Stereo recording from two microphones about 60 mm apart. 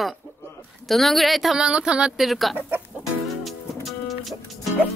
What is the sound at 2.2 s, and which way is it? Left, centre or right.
Speech, centre.